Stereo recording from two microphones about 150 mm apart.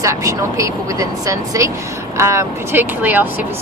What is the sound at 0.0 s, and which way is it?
Speech, 20° right (ahead or behind).